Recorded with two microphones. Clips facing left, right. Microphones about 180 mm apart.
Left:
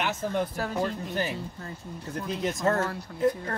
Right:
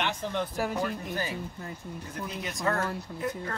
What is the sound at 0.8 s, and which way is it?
Speech, 20° left (ahead or behind).